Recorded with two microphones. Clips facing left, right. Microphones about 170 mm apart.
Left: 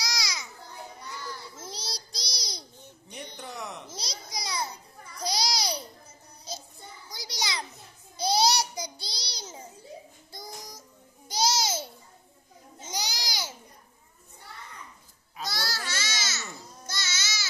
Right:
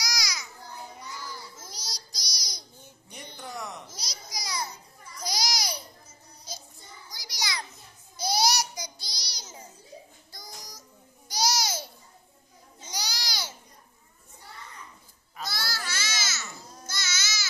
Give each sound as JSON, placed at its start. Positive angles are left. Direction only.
{"t": 0.0, "sound": "babbling", "side_deg": 25}
{"t": 1.6, "sound": "babbling", "side_deg": 30}
{"t": 3.3, "sound": "a sound", "side_deg": 0}
{"t": 3.9, "sound": "babbling", "side_deg": 25}
{"t": 7.2, "sound": "a sound", "side_deg": 25}
{"t": 8.2, "sound": "babbling", "side_deg": 25}
{"t": 10.3, "sound": "child singing", "side_deg": 25}
{"t": 11.2, "sound": "a sound", "side_deg": 25}
{"t": 12.8, "sound": "babbling", "side_deg": 20}
{"t": 15.5, "sound": "baby cry", "side_deg": 35}